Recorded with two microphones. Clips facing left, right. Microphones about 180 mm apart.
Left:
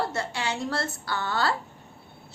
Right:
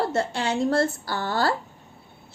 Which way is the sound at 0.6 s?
50° right (ahead or behind).